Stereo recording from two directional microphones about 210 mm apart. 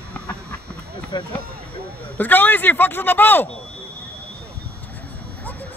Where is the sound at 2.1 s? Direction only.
10° left (ahead or behind).